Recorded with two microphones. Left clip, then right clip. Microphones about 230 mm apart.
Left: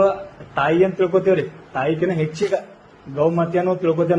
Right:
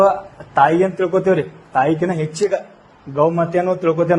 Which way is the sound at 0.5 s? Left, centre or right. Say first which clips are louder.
Right 4 dB; right.